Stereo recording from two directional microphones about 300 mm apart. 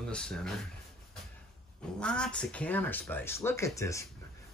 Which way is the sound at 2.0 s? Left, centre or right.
Centre.